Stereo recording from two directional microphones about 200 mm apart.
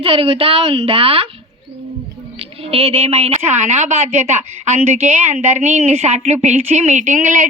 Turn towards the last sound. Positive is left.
turn(degrees=-40)  # may be behind; listen again after turning